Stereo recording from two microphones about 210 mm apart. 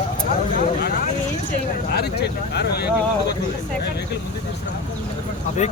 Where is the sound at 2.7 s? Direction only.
50° left (ahead or behind).